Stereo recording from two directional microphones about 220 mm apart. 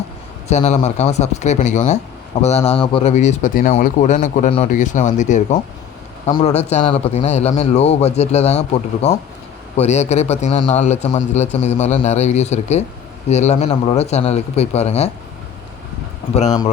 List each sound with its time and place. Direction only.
0.4 s a man's voice: 30° left (ahead or behind)
16.3 s a man's voice: 20° left (ahead or behind)